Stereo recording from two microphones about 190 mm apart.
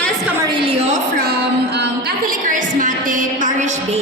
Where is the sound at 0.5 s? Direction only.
25° right (ahead or behind).